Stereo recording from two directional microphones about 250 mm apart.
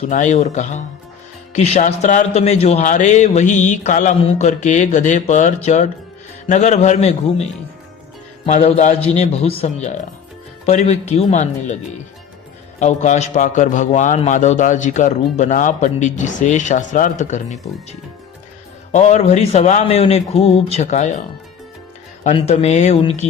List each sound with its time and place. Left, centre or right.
0.1 s a man's voice: left
8.4 s a man's voice: left
12.8 s a man's voice: left
18.9 s a man's voice: left
22.2 s a man's voice: left